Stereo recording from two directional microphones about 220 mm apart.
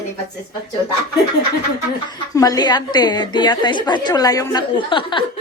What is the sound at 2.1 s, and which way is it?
A woman's voice, 15° left (ahead or behind).